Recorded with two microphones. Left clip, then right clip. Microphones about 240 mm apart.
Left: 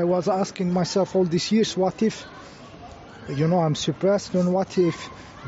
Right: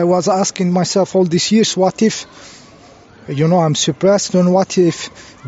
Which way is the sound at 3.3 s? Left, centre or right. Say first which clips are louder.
Right 8 dB; right.